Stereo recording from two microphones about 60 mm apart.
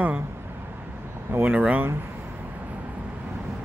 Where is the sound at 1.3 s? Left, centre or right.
Right.